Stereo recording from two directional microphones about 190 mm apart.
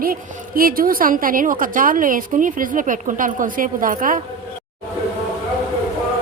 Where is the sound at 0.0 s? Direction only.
50° right (ahead or behind).